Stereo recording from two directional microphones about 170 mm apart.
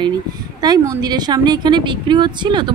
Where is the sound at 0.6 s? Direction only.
25° right (ahead or behind).